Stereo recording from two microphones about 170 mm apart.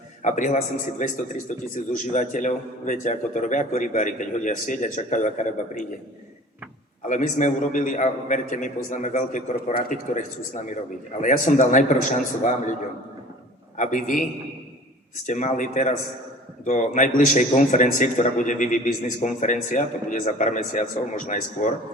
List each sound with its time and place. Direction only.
0.2 s a man's voice: 45° left (ahead or behind)
7.1 s a man's voice: 45° left (ahead or behind)
13.7 s a man's voice: 50° left (ahead or behind)